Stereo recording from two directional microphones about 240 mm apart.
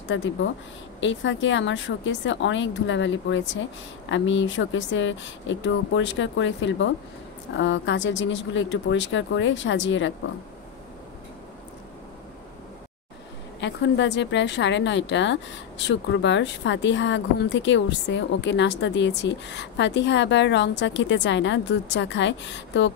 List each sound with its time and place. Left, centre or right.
0.1 s a woman's voice: left
13.6 s a woman's voice: left